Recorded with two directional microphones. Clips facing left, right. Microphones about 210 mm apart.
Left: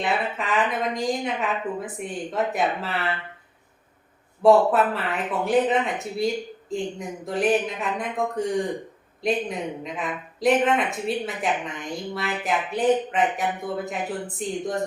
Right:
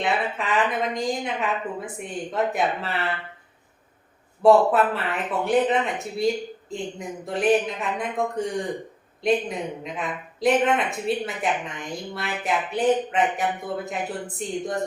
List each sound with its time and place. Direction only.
0.0 s a woman's voice: centre (ahead or behind)
4.4 s a woman's voice: centre (ahead or behind)